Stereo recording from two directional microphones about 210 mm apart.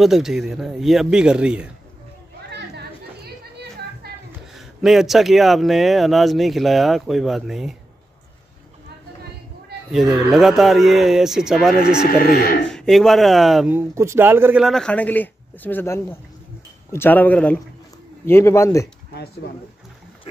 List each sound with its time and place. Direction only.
0.0 s speech: centre (ahead or behind)
4.0 s a sound: 50° right (ahead or behind)
4.6 s speech: centre (ahead or behind)
9.8 s speech: centre (ahead or behind)
12.1 s speech: 45° left (ahead or behind)
12.7 s speech: centre (ahead or behind)